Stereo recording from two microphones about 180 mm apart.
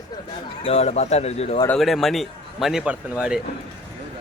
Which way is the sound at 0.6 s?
35° left (ahead or behind).